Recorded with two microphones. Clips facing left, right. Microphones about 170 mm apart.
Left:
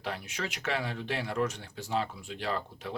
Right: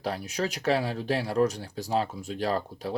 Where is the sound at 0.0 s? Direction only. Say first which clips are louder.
Right 6 dB; 40° right (ahead or behind).